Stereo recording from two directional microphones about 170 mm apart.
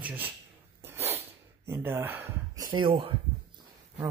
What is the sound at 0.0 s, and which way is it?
Speech, 10° right (ahead or behind).